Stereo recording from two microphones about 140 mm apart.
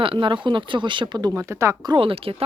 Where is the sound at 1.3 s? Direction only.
20° right (ahead or behind).